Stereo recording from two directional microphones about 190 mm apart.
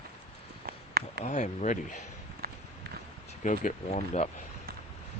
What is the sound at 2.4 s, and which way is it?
Run, 50° right (ahead or behind).